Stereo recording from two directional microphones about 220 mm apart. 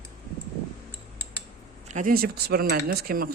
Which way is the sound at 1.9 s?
35° right (ahead or behind).